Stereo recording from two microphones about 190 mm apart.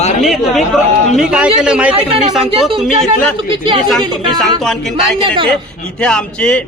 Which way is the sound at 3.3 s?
25° right (ahead or behind).